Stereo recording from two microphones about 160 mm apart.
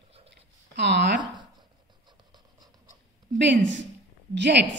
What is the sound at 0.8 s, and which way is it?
Speech, 90° right.